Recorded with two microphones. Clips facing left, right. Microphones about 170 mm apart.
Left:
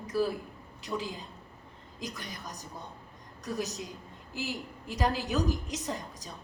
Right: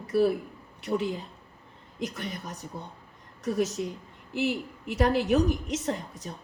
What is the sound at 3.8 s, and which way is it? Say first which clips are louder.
A woman's voice: right 8 dB; 55° right (ahead or behind).